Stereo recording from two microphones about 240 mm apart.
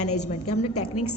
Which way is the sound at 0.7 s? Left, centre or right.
Left.